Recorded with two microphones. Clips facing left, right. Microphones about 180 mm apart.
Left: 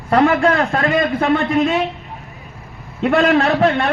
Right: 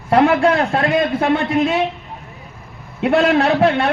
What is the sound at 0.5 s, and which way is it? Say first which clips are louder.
Speech: even; 15° right (ahead or behind).